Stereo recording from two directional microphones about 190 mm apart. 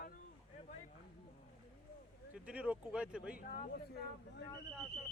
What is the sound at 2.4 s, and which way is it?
Speech, 5° right (ahead or behind).